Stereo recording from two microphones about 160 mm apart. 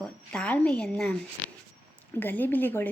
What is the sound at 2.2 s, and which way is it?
Speech, 10° left (ahead or behind).